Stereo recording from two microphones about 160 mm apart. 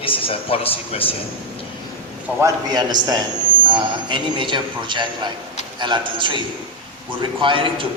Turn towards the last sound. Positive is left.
turn(degrees=-30)  # may be behind; listen again after turning